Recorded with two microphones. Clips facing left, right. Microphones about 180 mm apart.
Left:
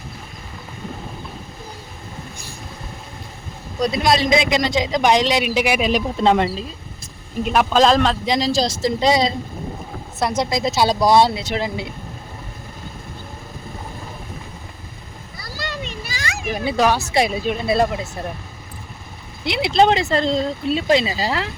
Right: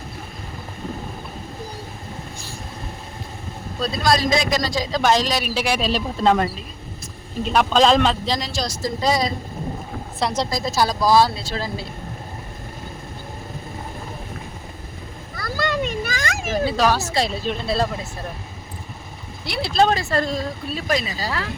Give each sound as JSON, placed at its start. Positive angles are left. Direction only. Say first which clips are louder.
{"t": 3.8, "sound": "a man's voice", "louder": "left 3 dB", "side_deg": 20}
{"t": 7.4, "sound": "speech", "louder": "left 1 dB", "side_deg": 5}
{"t": 8.4, "sound": "a man's voice", "louder": "left 7 dB", "side_deg": 30}
{"t": 10.2, "sound": "speech", "louder": "left 2 dB", "side_deg": 10}
{"t": 10.5, "sound": "a man's voice", "louder": "left 3 dB", "side_deg": 20}
{"t": 15.4, "sound": "a sound", "louder": "right 7 dB", "side_deg": -50}
{"t": 16.6, "sound": "speech", "louder": "left 3 dB", "side_deg": 15}
{"t": 19.5, "sound": "a man's voice", "louder": "left 3 dB", "side_deg": 20}